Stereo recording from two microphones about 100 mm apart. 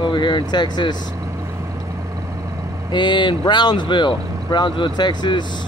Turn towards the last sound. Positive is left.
turn(degrees=50)  # may be behind; listen again after turning